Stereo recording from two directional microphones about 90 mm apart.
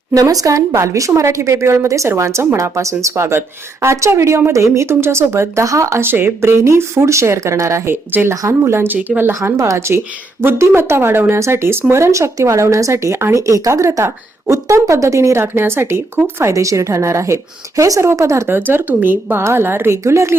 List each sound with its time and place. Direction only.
0.1 s speech: 40° right (ahead or behind); by 9.3 s 20° right (ahead or behind)
9.3 s speech: 35° right (ahead or behind)